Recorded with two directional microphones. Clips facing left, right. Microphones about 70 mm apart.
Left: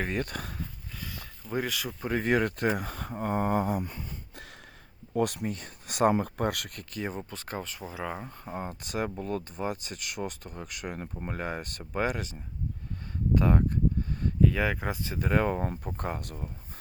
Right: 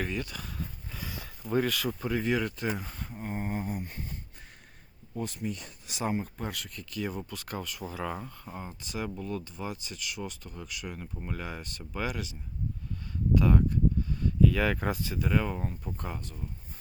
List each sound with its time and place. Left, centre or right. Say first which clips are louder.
0.1 s speech: left 3 dB; left
0.9 s a sound: right 1 dB; centre
1.5 s speech: right 3 dB; centre
2.1 s speech: left 5 dB; left
5.1 s speech: left 8 dB; left
5.5 s speech: left 1 dB; left
6.1 s speech: left 6 dB; left
6.9 s speech: even; left
8.5 s speech: left 5 dB; left
13.3 s a sound: even; left
14.5 s speech: right 1 dB; centre
15.3 s speech: left 4 dB; left